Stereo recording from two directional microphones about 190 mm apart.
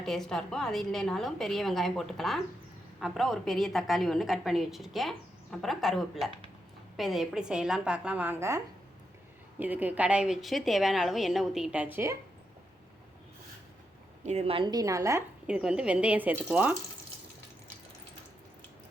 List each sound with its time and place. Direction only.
0.0 s a woman's voice: centre (ahead or behind)
14.3 s a woman's voice: 35° right (ahead or behind); by 15.2 s 15° right (ahead or behind)
15.4 s a woman's voice: 5° right (ahead or behind)